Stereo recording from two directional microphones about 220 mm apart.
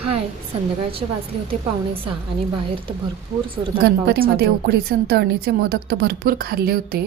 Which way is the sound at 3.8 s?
45° right (ahead or behind).